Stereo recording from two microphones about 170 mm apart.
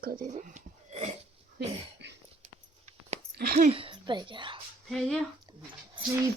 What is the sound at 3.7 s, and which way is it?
Speech, 30° right (ahead or behind).